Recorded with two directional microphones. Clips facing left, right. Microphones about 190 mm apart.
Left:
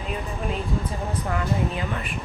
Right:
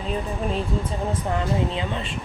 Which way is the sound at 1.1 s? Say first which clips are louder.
Right 2 dB; 25° right (ahead or behind).